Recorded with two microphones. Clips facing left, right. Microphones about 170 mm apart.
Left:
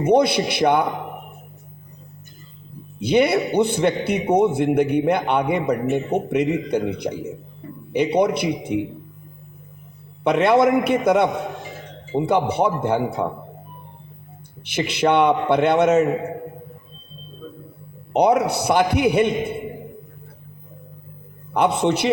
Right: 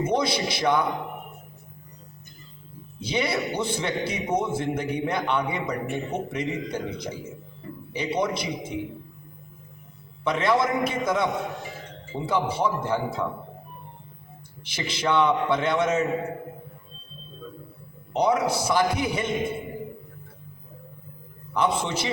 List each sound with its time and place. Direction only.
0.0 s a man's voice: 60° left (ahead or behind)
3.0 s a man's voice: 60° left (ahead or behind)
10.2 s a man's voice: 65° left (ahead or behind)
14.6 s a man's voice: 60° left (ahead or behind)
18.1 s a man's voice: 65° left (ahead or behind)
21.5 s a man's voice: 65° left (ahead or behind)